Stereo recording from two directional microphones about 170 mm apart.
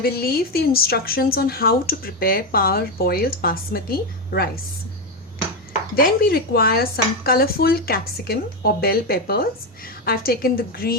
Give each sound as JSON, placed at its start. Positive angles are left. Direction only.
{"t": 0.0, "sound": "dishes", "side_deg": 65}
{"t": 6.0, "sound": "dishes", "side_deg": 60}